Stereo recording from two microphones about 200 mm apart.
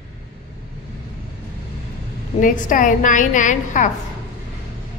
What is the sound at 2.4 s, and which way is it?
A woman's voice, 40° left (ahead or behind).